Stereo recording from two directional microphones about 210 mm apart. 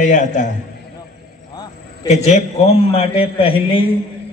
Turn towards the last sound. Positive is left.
turn(degrees=25)  # may be behind; listen again after turning